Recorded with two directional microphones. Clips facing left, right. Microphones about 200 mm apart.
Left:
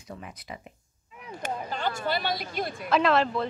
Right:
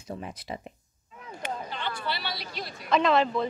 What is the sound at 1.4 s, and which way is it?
Speech, 45° left (ahead or behind).